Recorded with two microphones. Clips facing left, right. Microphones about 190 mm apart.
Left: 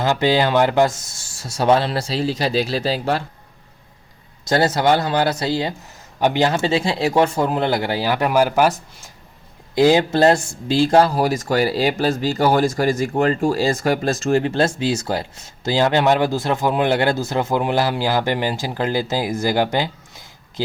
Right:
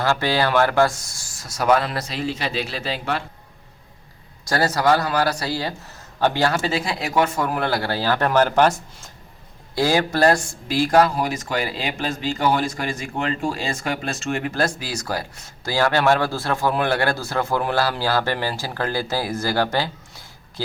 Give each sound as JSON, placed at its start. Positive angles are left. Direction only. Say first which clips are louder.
{"t": 0.0, "sound": "speech", "louder": "left 3 dB", "side_deg": 20}
{"t": 4.4, "sound": "speech", "louder": "left 3 dB", "side_deg": 20}
{"t": 9.7, "sound": "speech", "louder": "left 5 dB", "side_deg": 20}